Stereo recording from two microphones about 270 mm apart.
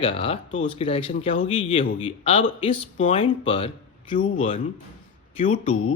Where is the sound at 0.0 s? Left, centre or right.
Left.